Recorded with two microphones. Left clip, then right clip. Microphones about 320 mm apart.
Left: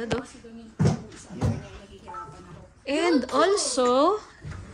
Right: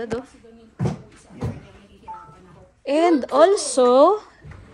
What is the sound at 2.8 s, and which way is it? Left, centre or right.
A woman's voice, centre.